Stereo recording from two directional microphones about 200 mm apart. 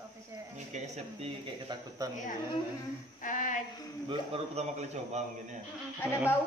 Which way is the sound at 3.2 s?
40° left (ahead or behind).